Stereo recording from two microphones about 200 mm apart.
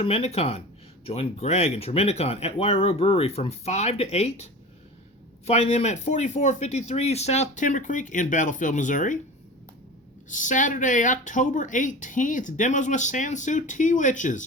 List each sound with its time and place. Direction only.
0.0 s speech: 30° left (ahead or behind)
5.5 s speech: 30° left (ahead or behind)
10.2 s speech: 40° left (ahead or behind)